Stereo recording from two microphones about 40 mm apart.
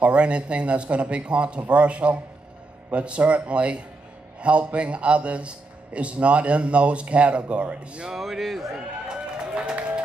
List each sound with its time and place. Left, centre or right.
0.0 s a man's voice: right
8.2 s speech: centre
8.7 s a sound: right